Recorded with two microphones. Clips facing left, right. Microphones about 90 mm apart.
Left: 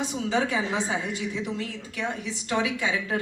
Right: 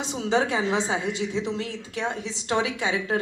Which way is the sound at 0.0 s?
20° right (ahead or behind).